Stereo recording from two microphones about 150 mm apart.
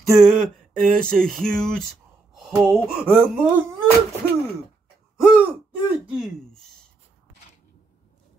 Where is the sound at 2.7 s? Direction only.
10° right (ahead or behind).